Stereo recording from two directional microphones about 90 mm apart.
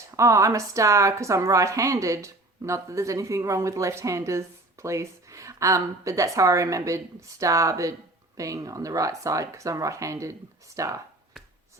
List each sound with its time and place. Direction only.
0.2 s a woman's voice: 35° right (ahead or behind)